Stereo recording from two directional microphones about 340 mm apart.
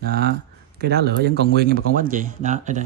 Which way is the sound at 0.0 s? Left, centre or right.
Right.